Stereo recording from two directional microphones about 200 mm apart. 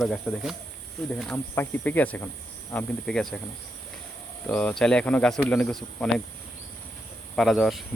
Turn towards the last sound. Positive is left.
turn(degrees=0)  # may be behind; listen again after turning